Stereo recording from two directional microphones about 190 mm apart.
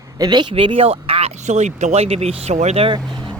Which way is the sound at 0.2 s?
20° right (ahead or behind).